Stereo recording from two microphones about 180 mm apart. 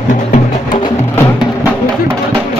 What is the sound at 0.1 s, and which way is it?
Music, 45° left (ahead or behind).